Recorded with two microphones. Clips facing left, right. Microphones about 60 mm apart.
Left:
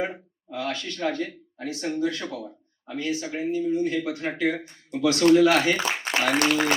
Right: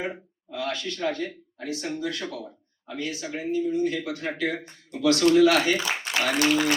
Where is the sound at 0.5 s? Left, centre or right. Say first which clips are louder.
Even; left.